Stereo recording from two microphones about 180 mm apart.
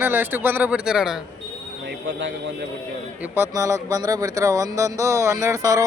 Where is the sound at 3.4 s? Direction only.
15° right (ahead or behind).